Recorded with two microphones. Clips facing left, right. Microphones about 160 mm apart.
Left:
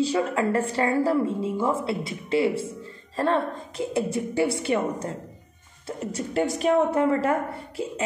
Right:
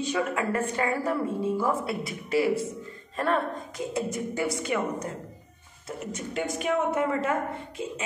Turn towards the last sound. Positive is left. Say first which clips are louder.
# left 2 dB
turn(degrees=35)  # may be behind; listen again after turning